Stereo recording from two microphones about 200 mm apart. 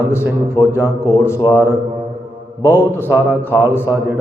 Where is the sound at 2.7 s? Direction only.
10° left (ahead or behind).